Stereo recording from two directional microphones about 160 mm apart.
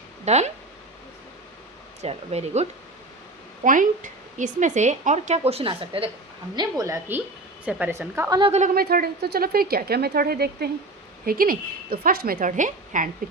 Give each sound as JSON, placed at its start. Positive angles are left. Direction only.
{"t": 0.3, "sound": "a woman's voice", "side_deg": -45}
{"t": 2.0, "sound": "a woman's voice", "side_deg": -45}
{"t": 3.6, "sound": "a woman's voice", "side_deg": -55}
{"t": 6.6, "sound": "a woman's voice", "side_deg": -20}
{"t": 8.4, "sound": "speech", "side_deg": -35}
{"t": 8.6, "sound": "speech", "side_deg": -70}
{"t": 11.3, "sound": "a woman's voice", "side_deg": -65}